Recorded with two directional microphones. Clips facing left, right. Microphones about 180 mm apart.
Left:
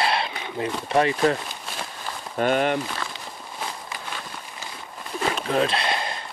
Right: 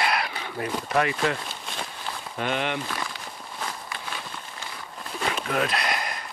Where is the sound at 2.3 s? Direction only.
45° left (ahead or behind).